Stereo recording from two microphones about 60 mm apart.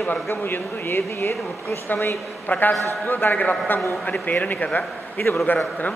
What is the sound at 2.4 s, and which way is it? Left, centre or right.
A man's voice, left.